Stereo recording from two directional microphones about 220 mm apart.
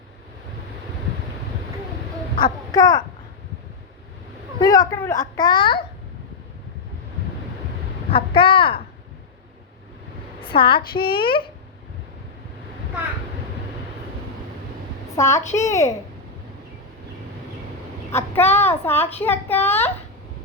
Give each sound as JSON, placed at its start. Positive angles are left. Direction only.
{"t": 2.3, "sound": "a sound", "side_deg": 20}
{"t": 4.6, "sound": "a woman's voice", "side_deg": 15}
{"t": 8.1, "sound": "speech", "side_deg": 25}
{"t": 10.4, "sound": "a woman's voice", "side_deg": 25}
{"t": 15.1, "sound": "a child's voice", "side_deg": 15}
{"t": 18.1, "sound": "a woman's voice", "side_deg": 10}